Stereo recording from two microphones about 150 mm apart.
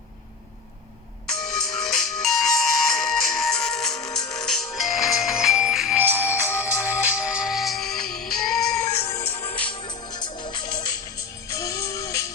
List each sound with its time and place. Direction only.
1.4 s music: centre (ahead or behind)
9.0 s music: 15° left (ahead or behind)
9.8 s music: 30° left (ahead or behind)